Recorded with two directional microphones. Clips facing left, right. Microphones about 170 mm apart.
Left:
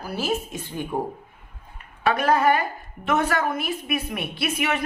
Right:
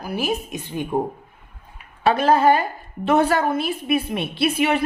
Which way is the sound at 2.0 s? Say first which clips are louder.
Right 4 dB; 30° right (ahead or behind).